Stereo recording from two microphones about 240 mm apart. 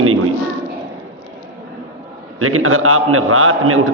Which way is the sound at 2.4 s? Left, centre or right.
Right.